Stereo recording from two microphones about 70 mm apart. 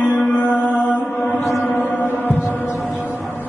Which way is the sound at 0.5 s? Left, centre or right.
Left.